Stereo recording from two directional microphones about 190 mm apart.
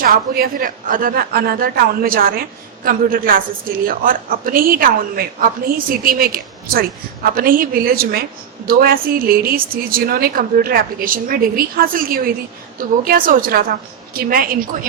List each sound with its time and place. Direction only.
0.0 s a woman's voice: 50° right (ahead or behind)